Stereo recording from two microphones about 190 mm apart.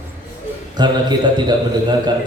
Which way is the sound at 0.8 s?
20° right (ahead or behind).